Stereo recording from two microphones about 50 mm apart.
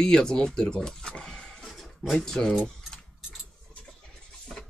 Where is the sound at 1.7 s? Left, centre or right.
Centre.